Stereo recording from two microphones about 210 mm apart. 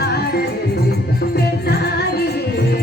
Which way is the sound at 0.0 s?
50° left (ahead or behind).